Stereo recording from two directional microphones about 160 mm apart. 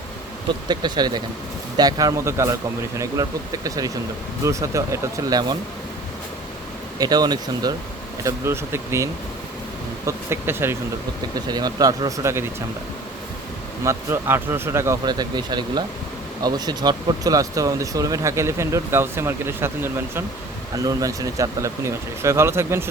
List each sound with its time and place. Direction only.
0.7 s speech: 25° right (ahead or behind)
7.0 s speech: 25° right (ahead or behind)
10.1 s speech: 15° right (ahead or behind)
11.3 s speech: 25° right (ahead or behind)
13.8 s speech: 15° right (ahead or behind)